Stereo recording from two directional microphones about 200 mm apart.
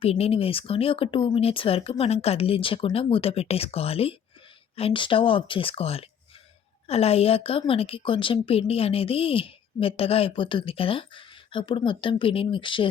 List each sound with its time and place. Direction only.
0.0 s a woman's voice: 30° left (ahead or behind)